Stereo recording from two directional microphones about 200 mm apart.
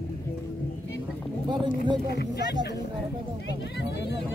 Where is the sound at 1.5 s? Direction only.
20° right (ahead or behind).